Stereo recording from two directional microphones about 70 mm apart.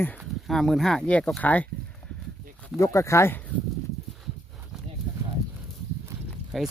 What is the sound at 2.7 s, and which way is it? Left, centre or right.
Speech, left.